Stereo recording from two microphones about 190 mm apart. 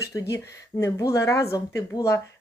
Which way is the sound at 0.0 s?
15° left (ahead or behind).